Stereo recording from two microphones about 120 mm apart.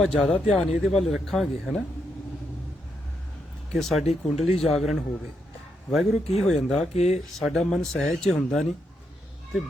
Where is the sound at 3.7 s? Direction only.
Centre (ahead or behind).